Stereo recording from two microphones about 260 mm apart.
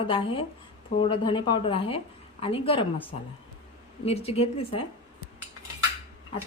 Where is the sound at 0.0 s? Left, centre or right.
Centre.